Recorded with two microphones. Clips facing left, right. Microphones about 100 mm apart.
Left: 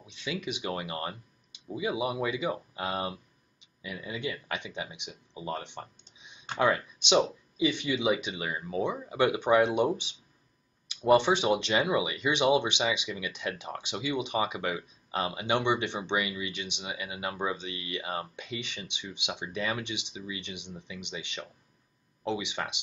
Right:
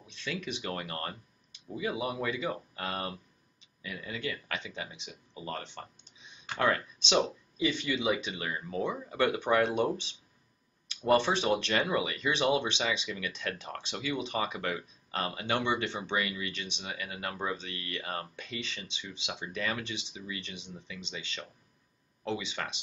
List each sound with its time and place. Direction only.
0.0 s speech: 15° left (ahead or behind)
11.1 s speech: 15° left (ahead or behind)